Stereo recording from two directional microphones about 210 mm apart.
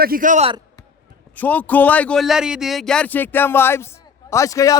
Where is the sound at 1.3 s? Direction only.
10° left (ahead or behind).